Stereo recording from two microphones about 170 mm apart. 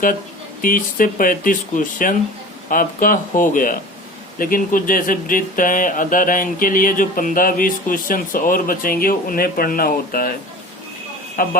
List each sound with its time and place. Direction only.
0.6 s speech: 55° left (ahead or behind)
11.4 s speech: 55° left (ahead or behind)